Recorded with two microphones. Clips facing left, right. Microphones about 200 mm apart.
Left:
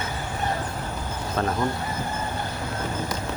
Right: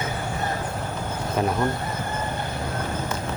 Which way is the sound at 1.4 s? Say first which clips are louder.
Right 2 dB; 15° right (ahead or behind).